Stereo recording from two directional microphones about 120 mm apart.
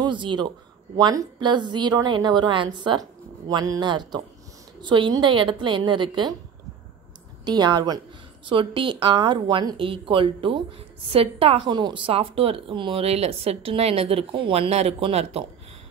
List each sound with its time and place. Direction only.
0.0 s speech: 40° right (ahead or behind)
0.9 s speech: 30° right (ahead or behind)
7.4 s speech: 35° right (ahead or behind)
11.7 s speech: 40° right (ahead or behind)